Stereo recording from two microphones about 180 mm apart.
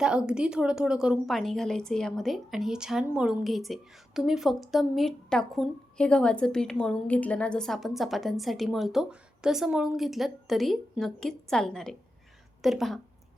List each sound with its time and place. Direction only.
0.0 s a woman's voice: 5° right (ahead or behind)